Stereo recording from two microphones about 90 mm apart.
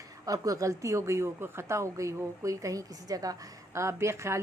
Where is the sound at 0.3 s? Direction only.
40° right (ahead or behind).